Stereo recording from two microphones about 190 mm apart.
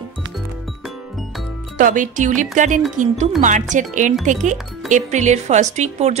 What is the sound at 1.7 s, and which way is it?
Speech, 45° right (ahead or behind).